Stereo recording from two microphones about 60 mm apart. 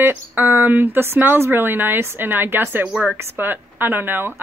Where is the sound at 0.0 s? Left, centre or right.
Right.